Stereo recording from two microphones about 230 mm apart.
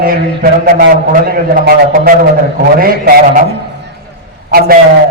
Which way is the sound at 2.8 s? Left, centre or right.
Right.